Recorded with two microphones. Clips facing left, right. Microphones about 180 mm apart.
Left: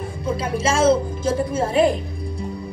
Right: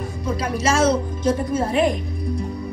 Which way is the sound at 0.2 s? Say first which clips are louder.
Left 1 dB; 30° left (ahead or behind).